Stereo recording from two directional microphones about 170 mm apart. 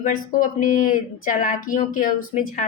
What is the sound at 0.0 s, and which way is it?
Speech, 50° left (ahead or behind).